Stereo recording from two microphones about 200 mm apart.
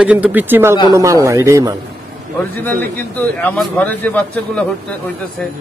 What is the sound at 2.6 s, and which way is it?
A man's voice, 10° left (ahead or behind).